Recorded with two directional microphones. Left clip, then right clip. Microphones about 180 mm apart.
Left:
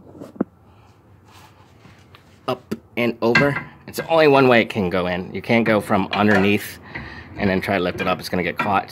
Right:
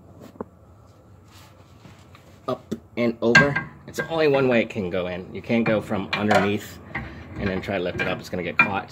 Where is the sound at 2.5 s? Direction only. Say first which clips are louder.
Left 3 dB; 50° left (ahead or behind).